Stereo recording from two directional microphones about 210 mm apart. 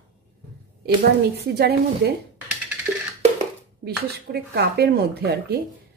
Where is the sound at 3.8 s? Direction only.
50° right (ahead or behind).